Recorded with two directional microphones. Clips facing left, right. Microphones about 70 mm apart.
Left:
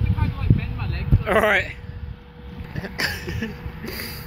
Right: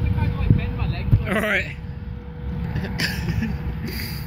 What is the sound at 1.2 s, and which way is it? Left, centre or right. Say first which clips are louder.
Speech: left 5 dB; left.